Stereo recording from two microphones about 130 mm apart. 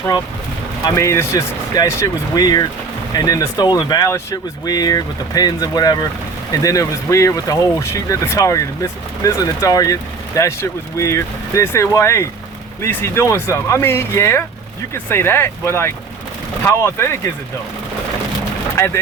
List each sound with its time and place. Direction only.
0.9 s speech: 20° left (ahead or behind)